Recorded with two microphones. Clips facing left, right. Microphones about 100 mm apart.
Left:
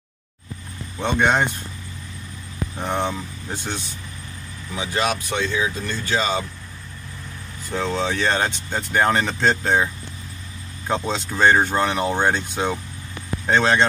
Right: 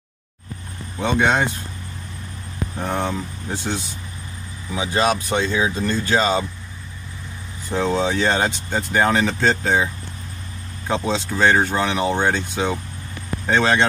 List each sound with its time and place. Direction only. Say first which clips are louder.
0.9 s speech: right 1 dB; 5° right (ahead or behind)
2.8 s speech: even; centre (ahead or behind)
4.7 s speech: right 4 dB; 25° right (ahead or behind)
7.7 s speech: right 3 dB; 20° right (ahead or behind)
8.7 s speech: right 1 dB; 5° right (ahead or behind)
10.9 s speech: right 2 dB; centre (ahead or behind)
13.5 s speech: even; 5° right (ahead or behind)